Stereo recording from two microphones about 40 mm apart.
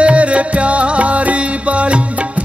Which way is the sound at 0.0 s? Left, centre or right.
Right.